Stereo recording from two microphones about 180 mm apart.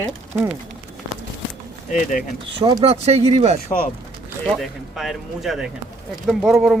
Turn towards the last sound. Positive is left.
turn(degrees=0)  # may be behind; listen again after turning